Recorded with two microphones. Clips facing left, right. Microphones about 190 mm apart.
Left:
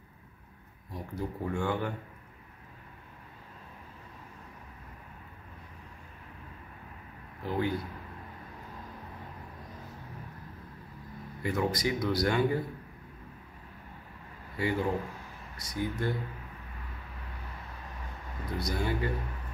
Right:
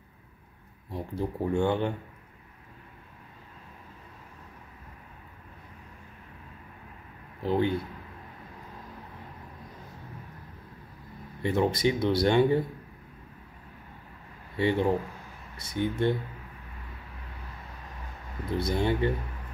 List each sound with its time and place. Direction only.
0.9 s speech: 30° right (ahead or behind)
7.4 s speech: 25° right (ahead or behind)
11.4 s speech: 25° right (ahead or behind)
14.6 s speech: 30° right (ahead or behind)
18.6 s speech: 25° right (ahead or behind)